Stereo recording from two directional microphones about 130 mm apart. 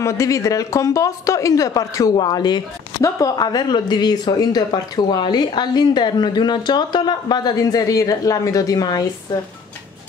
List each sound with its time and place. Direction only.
0.0 s speech: 25° left (ahead or behind)